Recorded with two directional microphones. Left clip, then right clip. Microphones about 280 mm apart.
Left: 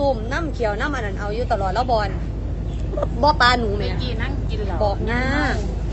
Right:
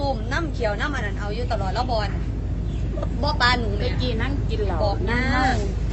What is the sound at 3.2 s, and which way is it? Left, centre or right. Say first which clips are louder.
Speech: left 5 dB; centre.